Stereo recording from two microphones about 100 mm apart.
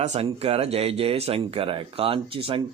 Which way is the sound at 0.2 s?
85° right.